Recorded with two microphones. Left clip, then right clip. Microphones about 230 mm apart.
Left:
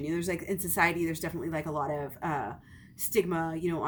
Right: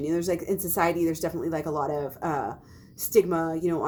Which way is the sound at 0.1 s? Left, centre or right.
Left.